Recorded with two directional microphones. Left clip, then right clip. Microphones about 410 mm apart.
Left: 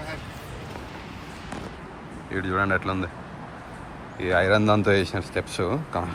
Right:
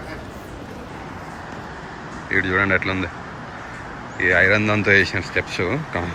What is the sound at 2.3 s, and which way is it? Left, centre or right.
Speech, centre.